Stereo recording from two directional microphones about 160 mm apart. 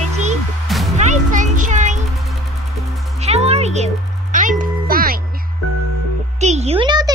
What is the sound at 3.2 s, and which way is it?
Music, 40° right (ahead or behind).